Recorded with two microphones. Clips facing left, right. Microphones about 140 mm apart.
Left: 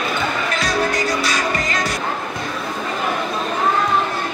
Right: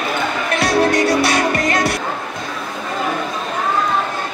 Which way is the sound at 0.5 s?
65° right (ahead or behind).